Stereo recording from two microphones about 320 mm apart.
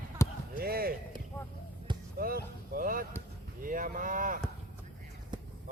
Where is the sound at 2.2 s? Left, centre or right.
Right.